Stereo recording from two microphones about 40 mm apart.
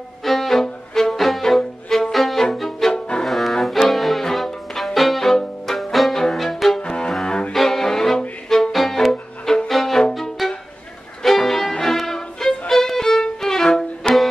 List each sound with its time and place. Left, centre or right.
0.2 s violin: centre
2.5 s music: centre
2.9 s bowed string instrument: centre
3.3 s music: centre
6.8 s cello: left
7.5 s music: centre
11.2 s violin: centre